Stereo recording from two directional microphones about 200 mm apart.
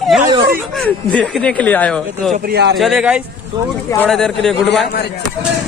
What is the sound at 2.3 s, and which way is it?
Speech, 50° right (ahead or behind).